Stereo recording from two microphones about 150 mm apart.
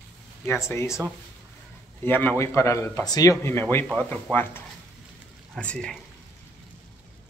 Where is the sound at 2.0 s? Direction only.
10° left (ahead or behind).